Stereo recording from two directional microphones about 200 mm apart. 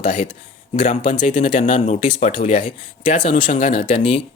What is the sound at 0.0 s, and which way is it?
Speech, 35° left (ahead or behind).